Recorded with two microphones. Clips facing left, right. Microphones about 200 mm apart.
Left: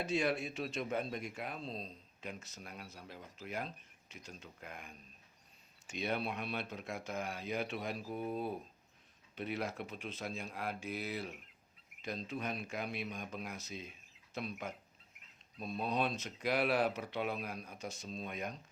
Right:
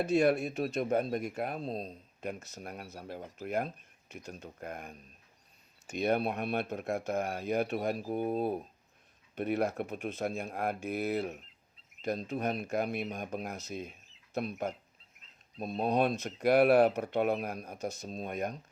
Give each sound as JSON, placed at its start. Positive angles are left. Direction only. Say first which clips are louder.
{"t": 0.2, "sound": "speech", "louder": "right 8 dB", "side_deg": -55}
{"t": 8.0, "sound": "speech", "louder": "right 7 dB", "side_deg": -60}
{"t": 15.8, "sound": "speech", "louder": "right 7 dB", "side_deg": -50}